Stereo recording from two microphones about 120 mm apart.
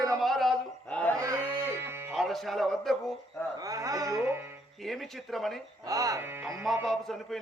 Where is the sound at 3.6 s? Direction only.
30° right (ahead or behind).